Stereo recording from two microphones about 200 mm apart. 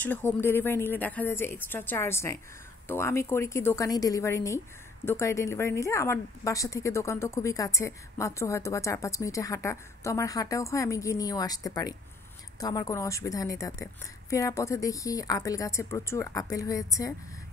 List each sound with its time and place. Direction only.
0.0 s a woman's voice: 10° left (ahead or behind)